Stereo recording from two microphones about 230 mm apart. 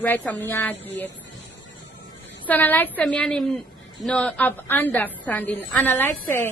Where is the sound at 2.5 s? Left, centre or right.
Centre.